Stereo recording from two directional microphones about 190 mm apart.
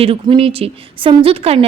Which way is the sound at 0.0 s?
30° right (ahead or behind).